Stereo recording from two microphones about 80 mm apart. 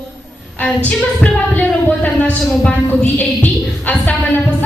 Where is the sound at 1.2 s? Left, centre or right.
Left.